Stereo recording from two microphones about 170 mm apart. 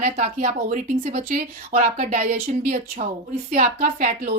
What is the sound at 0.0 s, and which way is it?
Speech, 45° right (ahead or behind).